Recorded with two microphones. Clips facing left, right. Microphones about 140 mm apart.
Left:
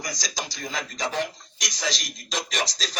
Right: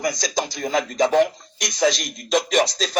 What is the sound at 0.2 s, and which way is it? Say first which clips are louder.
Speech: right 9 dB; 50° right (ahead or behind).